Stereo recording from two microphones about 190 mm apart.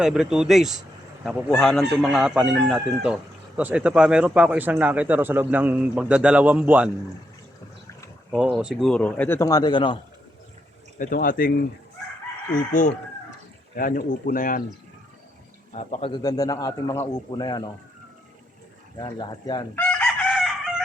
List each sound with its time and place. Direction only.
0.0 s speech: 5° right (ahead or behind)
8.3 s speech: 5° right (ahead or behind); by 10.0 s 25° left (ahead or behind)
10.9 s speech: 45° left (ahead or behind)
12.8 s speech: 45° left (ahead or behind)
15.7 s speech: 35° left (ahead or behind)
16.2 s a man's voice: 20° left (ahead or behind)
18.9 s a man's voice: 20° left (ahead or behind)
19.7 s chicken: 5° left (ahead or behind)